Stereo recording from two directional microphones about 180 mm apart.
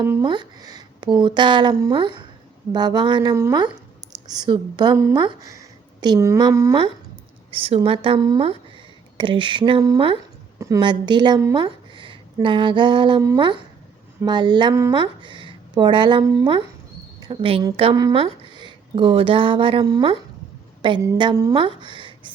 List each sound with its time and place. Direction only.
0.0 s speech: 20° right (ahead or behind)
7.5 s a woman's voice: 30° right (ahead or behind)
21.8 s a sound: 25° right (ahead or behind)